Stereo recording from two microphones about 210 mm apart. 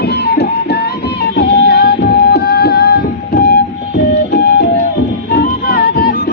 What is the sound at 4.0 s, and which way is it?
Printer, 50° left (ahead or behind).